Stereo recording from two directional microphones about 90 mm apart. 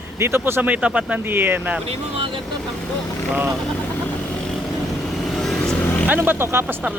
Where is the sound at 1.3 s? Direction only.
20° right (ahead or behind).